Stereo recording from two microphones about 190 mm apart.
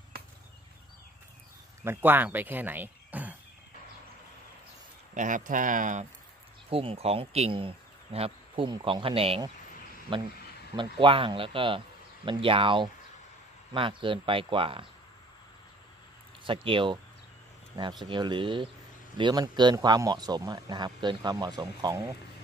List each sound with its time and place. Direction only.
1.9 s speech: 10° right (ahead or behind)
5.1 s speech: 40° right (ahead or behind)
6.7 s speech: 30° right (ahead or behind)
16.4 s speech: 25° right (ahead or behind)
18.0 s speech: 25° right (ahead or behind)